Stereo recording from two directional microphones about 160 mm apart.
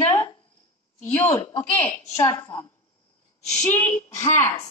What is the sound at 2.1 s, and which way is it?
Speech, 15° left (ahead or behind).